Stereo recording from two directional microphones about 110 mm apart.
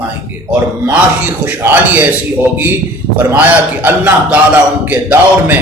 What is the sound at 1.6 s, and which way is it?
A man's voice, 15° right (ahead or behind).